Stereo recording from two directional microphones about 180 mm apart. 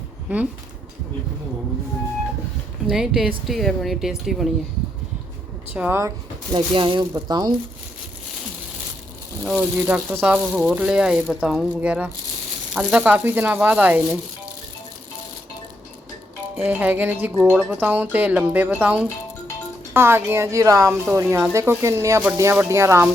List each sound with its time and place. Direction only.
2.8 s speech: 5° right (ahead or behind)
5.7 s speech: 10° right (ahead or behind)
6.5 s speech: 25° right (ahead or behind)
9.4 s speech: 5° right (ahead or behind)
16.6 s speech: 10° right (ahead or behind)